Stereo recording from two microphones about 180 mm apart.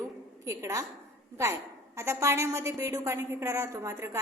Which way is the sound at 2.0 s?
15° right (ahead or behind).